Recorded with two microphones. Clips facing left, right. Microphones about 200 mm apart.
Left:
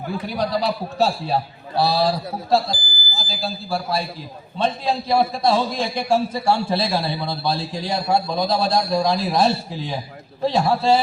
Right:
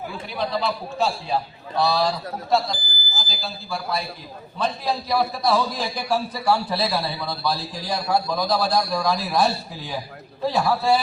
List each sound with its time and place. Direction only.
0.3 s a man's voice: 40° left (ahead or behind); by 11.0 s 25° left (ahead or behind)